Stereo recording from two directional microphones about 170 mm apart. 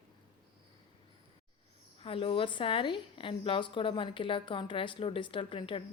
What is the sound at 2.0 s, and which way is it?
A woman's voice, 30° left (ahead or behind).